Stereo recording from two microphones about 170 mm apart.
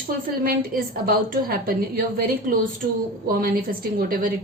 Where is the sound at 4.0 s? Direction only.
60° right (ahead or behind).